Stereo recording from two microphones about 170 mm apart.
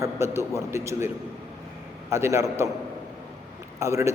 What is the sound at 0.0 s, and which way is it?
A man's voice, 15° right (ahead or behind).